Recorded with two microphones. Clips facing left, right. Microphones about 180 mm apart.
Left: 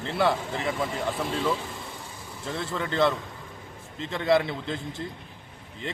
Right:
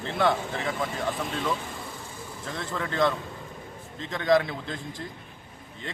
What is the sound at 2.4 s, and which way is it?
Speech, 30° left (ahead or behind).